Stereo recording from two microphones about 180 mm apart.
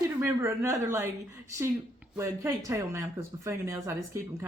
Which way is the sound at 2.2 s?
15° right (ahead or behind).